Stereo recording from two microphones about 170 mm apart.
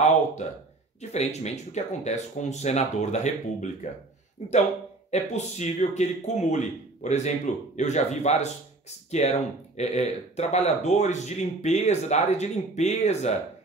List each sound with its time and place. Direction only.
0.4 s a man's voice: 40° left (ahead or behind)